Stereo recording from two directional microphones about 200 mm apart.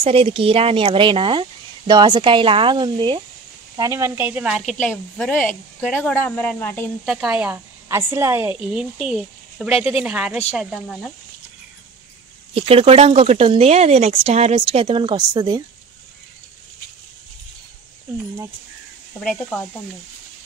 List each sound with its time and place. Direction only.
0.0 s a woman's voice: 25° right (ahead or behind); by 6.9 s 10° left (ahead or behind)
7.1 s a woman's voice: 5° right (ahead or behind)
12.5 s speech: 30° right (ahead or behind)